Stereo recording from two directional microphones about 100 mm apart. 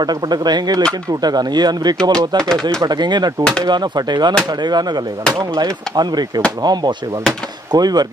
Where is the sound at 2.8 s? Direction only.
45° right (ahead or behind).